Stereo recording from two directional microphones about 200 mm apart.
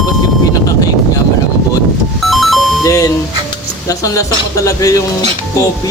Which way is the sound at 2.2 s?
Centre (ahead or behind).